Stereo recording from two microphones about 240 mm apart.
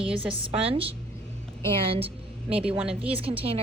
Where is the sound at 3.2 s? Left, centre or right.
Right.